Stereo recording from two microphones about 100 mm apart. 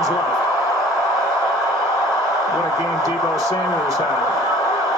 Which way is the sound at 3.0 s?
30° right (ahead or behind).